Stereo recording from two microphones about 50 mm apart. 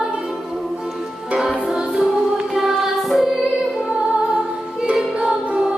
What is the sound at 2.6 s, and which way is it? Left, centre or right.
Music, centre.